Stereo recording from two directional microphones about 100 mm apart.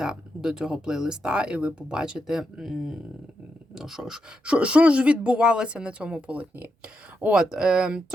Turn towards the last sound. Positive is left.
turn(degrees=-5)  # may be behind; listen again after turning